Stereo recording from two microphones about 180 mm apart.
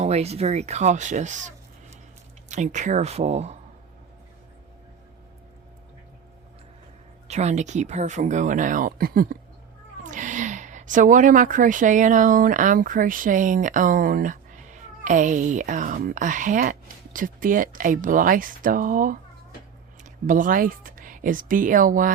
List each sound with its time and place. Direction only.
0.0 s speech: 35° right (ahead or behind)
7.3 s a woman's voice: 40° right (ahead or behind)